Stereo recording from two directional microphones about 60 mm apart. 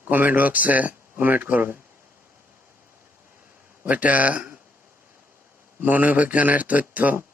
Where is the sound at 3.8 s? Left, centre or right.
Right.